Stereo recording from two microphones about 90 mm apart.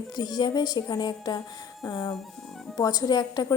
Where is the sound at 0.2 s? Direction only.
50° left (ahead or behind).